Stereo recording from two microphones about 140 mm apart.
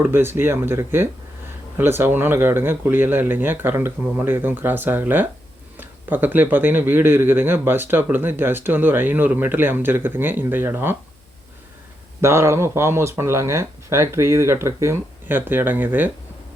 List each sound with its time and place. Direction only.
0.0 s speech: 15° right (ahead or behind)
12.2 s speech: 20° right (ahead or behind)